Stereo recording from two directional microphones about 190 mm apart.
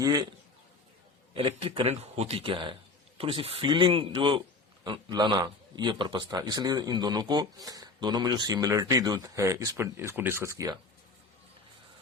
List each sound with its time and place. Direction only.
0.0 s speech: 20° right (ahead or behind)
1.3 s speech: 30° right (ahead or behind)